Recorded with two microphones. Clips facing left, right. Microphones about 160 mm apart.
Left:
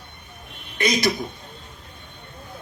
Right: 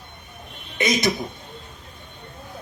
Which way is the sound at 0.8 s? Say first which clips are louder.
Even; 20° right (ahead or behind).